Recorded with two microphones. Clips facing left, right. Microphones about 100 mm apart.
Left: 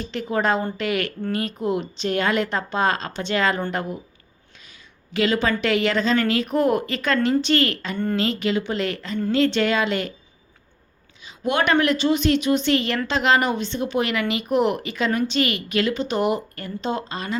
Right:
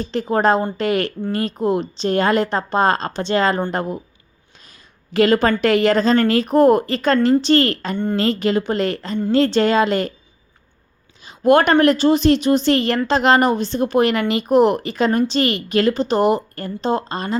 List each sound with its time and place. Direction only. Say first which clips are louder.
0.0 s a woman's voice: right 6 dB; 35° right (ahead or behind)
11.2 s a woman's voice: right 9 dB; 45° right (ahead or behind)